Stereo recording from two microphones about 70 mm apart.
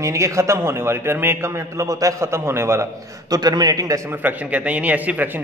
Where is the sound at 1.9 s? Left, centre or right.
Right.